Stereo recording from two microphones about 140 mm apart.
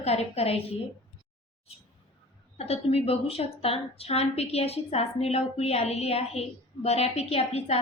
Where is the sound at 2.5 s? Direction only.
50° left (ahead or behind).